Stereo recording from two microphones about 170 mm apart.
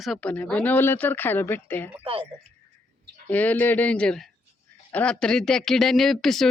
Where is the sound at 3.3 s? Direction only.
10° left (ahead or behind).